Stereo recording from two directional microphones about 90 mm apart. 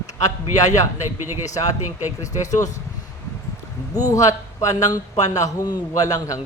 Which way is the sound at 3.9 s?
40° left (ahead or behind).